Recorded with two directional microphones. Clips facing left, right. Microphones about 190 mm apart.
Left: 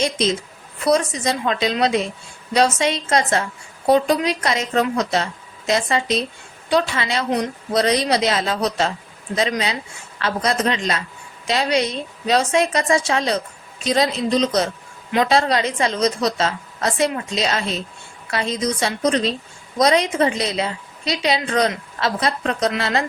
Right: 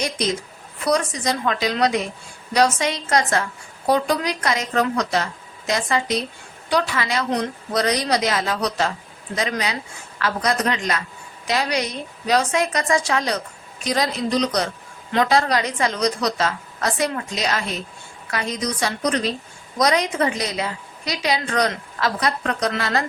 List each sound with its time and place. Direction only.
0.0 s a woman's voice: 25° left (ahead or behind)